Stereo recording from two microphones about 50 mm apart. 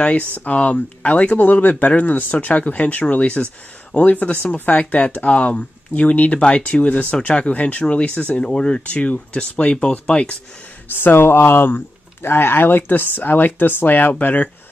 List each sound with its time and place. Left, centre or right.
0.0 s speech: left
11.0 s speech: left